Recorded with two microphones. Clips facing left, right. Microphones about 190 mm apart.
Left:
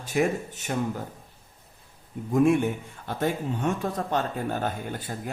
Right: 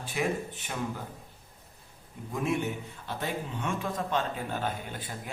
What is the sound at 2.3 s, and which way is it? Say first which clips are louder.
Speech: left 9 dB; 50° left (ahead or behind).